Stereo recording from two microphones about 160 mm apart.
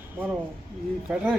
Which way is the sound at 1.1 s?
10° right (ahead or behind).